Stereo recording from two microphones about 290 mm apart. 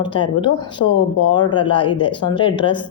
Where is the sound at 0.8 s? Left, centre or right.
Left.